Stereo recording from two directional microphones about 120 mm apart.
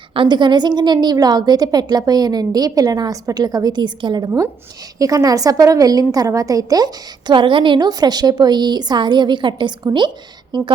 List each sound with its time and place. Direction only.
0.1 s a woman's voice: 40° right (ahead or behind)